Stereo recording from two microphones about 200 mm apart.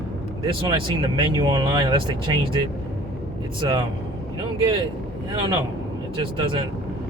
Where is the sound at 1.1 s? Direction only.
20° right (ahead or behind).